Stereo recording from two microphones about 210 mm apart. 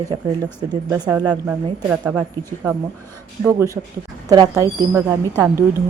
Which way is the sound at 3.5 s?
15° right (ahead or behind).